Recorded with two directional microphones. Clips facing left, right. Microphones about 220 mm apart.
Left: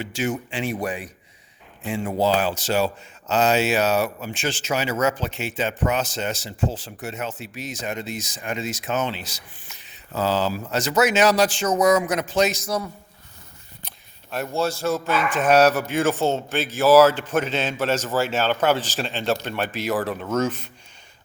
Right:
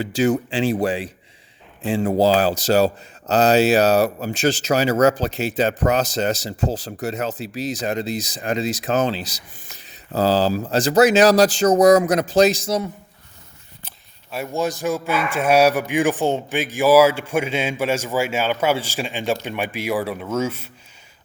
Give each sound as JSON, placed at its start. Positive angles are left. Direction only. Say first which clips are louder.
{"t": 0.1, "sound": "speech", "louder": "right 9 dB", "side_deg": -35}
{"t": 13.8, "sound": "speech", "louder": "left 1 dB", "side_deg": -5}